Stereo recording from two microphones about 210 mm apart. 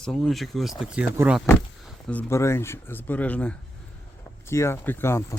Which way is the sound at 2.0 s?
10° left (ahead or behind).